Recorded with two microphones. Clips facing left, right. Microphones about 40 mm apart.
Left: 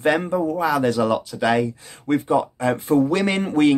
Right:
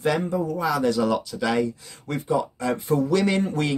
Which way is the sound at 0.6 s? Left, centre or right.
Left.